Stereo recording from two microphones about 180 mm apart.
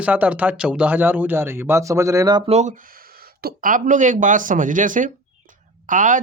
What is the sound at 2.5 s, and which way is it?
Speech, 40° right (ahead or behind).